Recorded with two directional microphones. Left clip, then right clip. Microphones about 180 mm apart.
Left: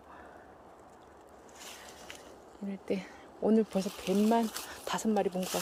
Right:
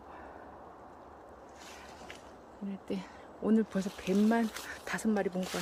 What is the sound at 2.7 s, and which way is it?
Speech, 10° left (ahead or behind).